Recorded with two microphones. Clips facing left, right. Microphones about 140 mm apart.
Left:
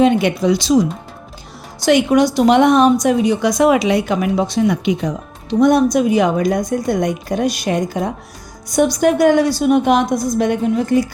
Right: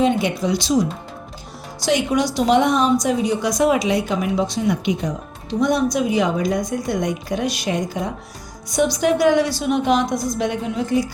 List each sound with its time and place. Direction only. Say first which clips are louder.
0.0 s speech: left 5 dB; 70° left (ahead or behind)
1.8 s a woman's voice: left 6 dB; 60° left (ahead or behind)